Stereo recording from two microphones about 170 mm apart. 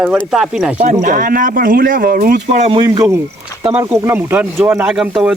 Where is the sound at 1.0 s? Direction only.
55° right (ahead or behind).